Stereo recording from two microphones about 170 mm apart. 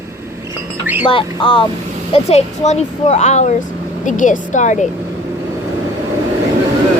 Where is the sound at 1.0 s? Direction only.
30° left (ahead or behind).